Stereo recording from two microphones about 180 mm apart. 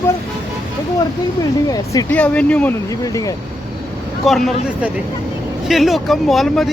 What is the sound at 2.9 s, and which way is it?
Speech, 20° left (ahead or behind).